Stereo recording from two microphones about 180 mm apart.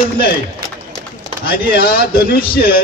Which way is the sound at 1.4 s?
55° left (ahead or behind).